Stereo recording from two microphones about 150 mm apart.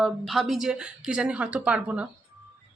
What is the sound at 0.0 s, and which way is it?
Speech, centre (ahead or behind).